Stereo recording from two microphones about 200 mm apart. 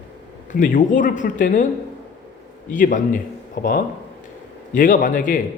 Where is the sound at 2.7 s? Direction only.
40° left (ahead or behind).